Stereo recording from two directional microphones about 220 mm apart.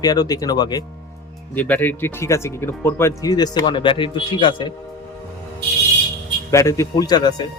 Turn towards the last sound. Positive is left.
turn(degrees=20)  # may be behind; listen again after turning